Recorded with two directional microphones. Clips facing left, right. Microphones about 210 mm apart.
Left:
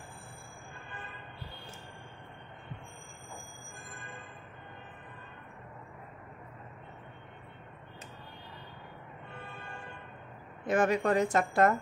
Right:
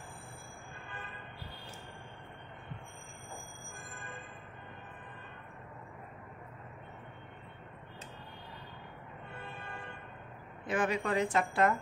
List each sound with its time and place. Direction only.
10.7 s a woman's voice: 45° left (ahead or behind)